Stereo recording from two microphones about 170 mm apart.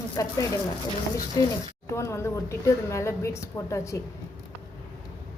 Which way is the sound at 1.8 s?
15° left (ahead or behind).